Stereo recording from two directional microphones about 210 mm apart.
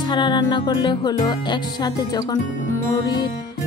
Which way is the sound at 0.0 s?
20° left (ahead or behind).